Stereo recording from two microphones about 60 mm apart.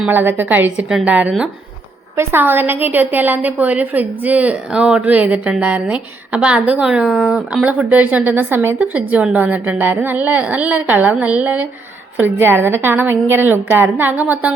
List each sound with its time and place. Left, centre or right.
0.1 s a woman's voice: right
2.1 s a woman's voice: right
4.7 s a woman's voice: centre
7.7 s a woman's voice: right
8.8 s a woman's voice: right
12.1 s a woman's voice: right